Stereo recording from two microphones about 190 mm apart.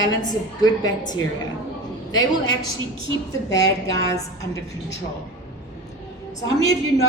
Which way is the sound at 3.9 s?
15° left (ahead or behind).